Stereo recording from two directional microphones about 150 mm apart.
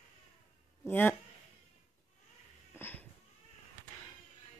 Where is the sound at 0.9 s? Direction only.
15° left (ahead or behind).